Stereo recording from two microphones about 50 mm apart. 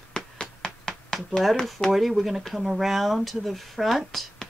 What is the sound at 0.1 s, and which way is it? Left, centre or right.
Tap, centre.